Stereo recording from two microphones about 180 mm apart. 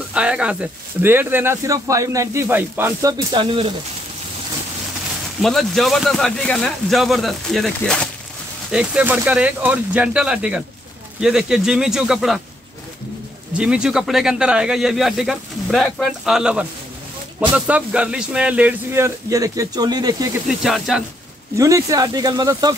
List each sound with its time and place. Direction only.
0.1 s speech: 5° right (ahead or behind); by 3.7 s 30° right (ahead or behind)
5.4 s speech: centre (ahead or behind)
8.7 s speech: 5° right (ahead or behind)
13.6 s speech: 5° right (ahead or behind)
20.4 s speech: centre (ahead or behind)
21.5 s speech: 20° right (ahead or behind)